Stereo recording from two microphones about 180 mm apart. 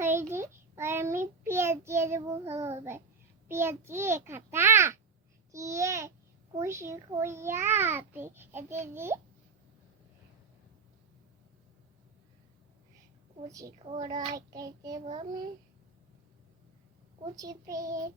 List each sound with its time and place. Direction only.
0.0 s a child's voice: 15° right (ahead or behind)
13.5 s child singing: 20° right (ahead or behind)
13.7 s a child's voice: 35° right (ahead or behind)
14.1 s child singing: 20° right (ahead or behind)
15.0 s a child's voice: 35° right (ahead or behind)
17.3 s child singing: 20° right (ahead or behind)